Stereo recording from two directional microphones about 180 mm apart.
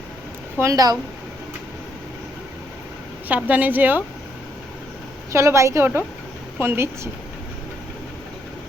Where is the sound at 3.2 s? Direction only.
10° right (ahead or behind).